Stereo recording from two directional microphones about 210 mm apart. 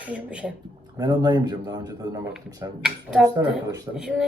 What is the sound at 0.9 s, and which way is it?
A man's voice, 20° right (ahead or behind).